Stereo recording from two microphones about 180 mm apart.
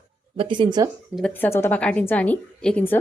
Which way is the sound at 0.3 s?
25° right (ahead or behind).